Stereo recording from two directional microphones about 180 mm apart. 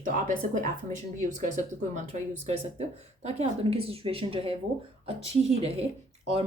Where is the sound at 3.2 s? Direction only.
35° right (ahead or behind).